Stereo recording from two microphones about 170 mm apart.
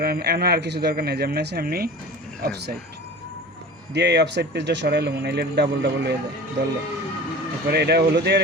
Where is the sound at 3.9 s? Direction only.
90° right.